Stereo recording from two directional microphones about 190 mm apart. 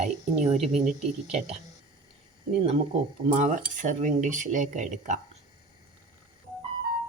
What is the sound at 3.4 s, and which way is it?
Speech, 40° right (ahead or behind).